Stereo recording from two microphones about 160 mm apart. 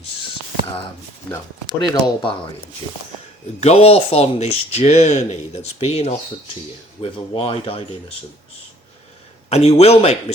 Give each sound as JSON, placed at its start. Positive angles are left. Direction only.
{"t": 1.8, "sound": "speech", "side_deg": 30}
{"t": 9.5, "sound": "speech", "side_deg": 40}